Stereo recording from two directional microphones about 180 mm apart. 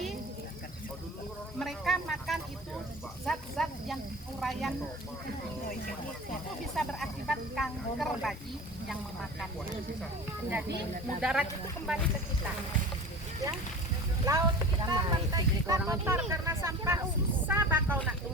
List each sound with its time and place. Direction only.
1.5 s a sound: centre (ahead or behind)
3.2 s snake: centre (ahead or behind)
6.7 s snake: centre (ahead or behind)
11.2 s speech: 5° right (ahead or behind)
14.3 s a sound: 20° right (ahead or behind)
15.9 s vehicle: 15° right (ahead or behind)